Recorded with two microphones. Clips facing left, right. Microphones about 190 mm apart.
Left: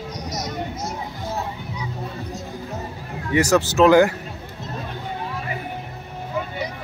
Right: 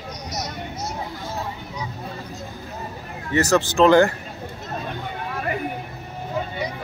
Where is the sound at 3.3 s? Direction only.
10° left (ahead or behind).